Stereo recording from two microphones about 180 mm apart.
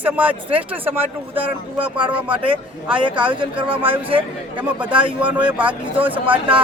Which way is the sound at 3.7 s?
30° right (ahead or behind).